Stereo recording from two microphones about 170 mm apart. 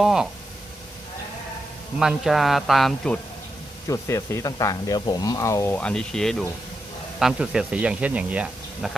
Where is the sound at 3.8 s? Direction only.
20° left (ahead or behind); by 8.9 s 10° right (ahead or behind).